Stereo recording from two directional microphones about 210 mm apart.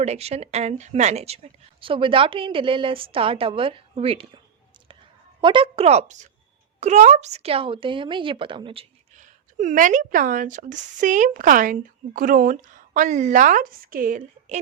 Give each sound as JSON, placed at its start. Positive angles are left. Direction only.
{"t": 0.0, "sound": "a woman's voice", "side_deg": -30}
{"t": 5.4, "sound": "a woman's voice", "side_deg": -25}